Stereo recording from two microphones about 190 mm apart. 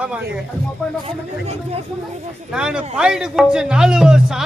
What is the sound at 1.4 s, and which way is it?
Speech, 35° right (ahead or behind).